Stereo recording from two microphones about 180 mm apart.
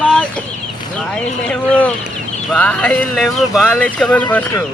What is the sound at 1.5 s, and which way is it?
Speech, 10° left (ahead or behind).